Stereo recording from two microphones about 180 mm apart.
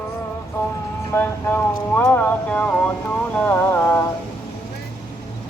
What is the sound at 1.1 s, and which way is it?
Speech, 10° left (ahead or behind).